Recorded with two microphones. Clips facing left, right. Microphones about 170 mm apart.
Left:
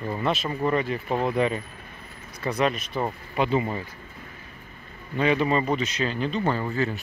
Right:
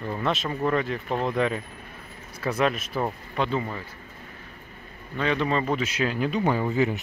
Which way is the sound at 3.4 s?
15° left (ahead or behind).